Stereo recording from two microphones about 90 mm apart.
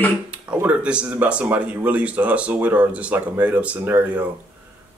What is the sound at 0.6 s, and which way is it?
Speech, 15° right (ahead or behind).